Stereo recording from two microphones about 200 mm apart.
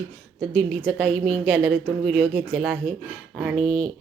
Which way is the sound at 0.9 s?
5° left (ahead or behind).